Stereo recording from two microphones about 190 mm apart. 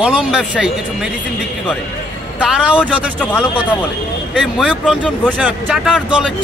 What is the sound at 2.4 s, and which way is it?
Speech, 5° right (ahead or behind).